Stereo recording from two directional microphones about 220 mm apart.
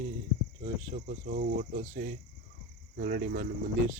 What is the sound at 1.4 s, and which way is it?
Speech, 40° right (ahead or behind).